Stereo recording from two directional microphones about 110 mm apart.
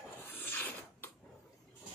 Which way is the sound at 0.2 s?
20° left (ahead or behind).